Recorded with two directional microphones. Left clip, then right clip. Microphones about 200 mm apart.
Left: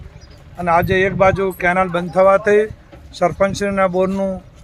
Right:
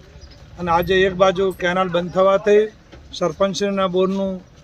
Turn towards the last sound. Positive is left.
turn(degrees=5)  # may be behind; listen again after turning